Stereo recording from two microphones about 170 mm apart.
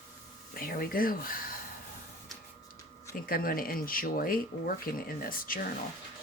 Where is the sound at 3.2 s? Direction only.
60° left (ahead or behind).